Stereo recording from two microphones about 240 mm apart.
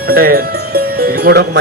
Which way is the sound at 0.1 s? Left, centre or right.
Right.